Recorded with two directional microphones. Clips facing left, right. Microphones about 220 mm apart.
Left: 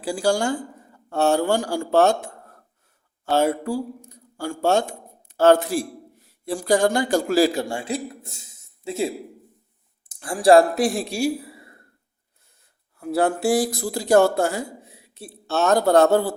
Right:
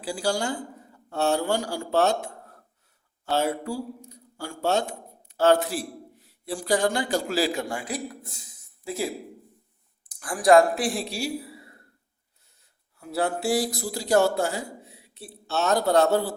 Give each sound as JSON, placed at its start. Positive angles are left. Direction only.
{"t": 0.0, "sound": "speech", "side_deg": 50}
{"t": 3.3, "sound": "a man's voice", "side_deg": 50}
{"t": 7.7, "sound": "speech", "side_deg": 25}
{"t": 10.8, "sound": "speech", "side_deg": 45}
{"t": 13.0, "sound": "speech", "side_deg": 50}